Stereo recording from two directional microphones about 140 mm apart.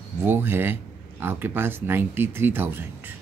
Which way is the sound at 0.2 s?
15° right (ahead or behind).